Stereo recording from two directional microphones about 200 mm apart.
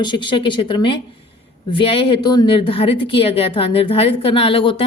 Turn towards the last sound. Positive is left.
turn(degrees=25)  # may be behind; listen again after turning